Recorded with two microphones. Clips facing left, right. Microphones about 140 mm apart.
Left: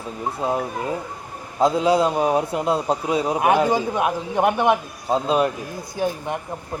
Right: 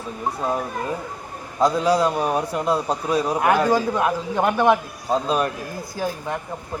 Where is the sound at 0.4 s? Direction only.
15° left (ahead or behind).